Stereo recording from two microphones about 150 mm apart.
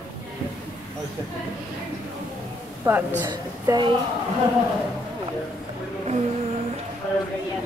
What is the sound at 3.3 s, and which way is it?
Speech, 30° right (ahead or behind).